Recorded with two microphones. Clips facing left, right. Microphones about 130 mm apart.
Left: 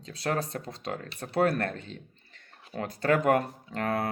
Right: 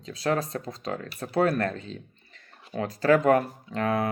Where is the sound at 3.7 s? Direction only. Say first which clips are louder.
Right 3 dB; 35° left (ahead or behind).